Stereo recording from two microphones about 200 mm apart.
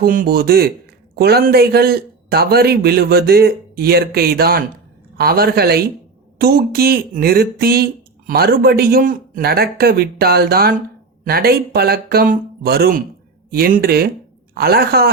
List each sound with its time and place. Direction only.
0.0 s a man's voice: 45° right (ahead or behind)